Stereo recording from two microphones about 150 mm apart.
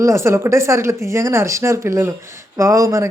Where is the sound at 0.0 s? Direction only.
20° right (ahead or behind).